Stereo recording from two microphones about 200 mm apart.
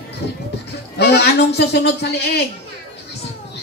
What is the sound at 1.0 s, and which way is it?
A woman's voice, 55° left (ahead or behind).